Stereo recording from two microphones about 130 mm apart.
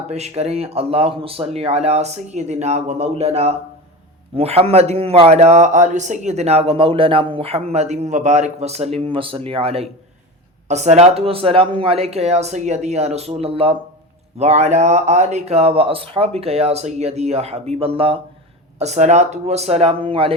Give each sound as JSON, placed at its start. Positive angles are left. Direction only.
{"t": 0.1, "sound": "a man's voice", "side_deg": -55}
{"t": 10.7, "sound": "a man's voice", "side_deg": -60}
{"t": 18.8, "sound": "speech", "side_deg": -60}